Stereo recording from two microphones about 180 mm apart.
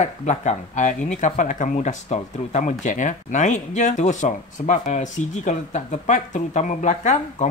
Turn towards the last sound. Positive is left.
turn(degrees=40)  # may be behind; listen again after turning